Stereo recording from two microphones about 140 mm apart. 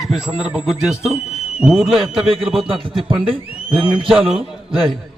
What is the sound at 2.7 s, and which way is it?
Speech, 40° right (ahead or behind).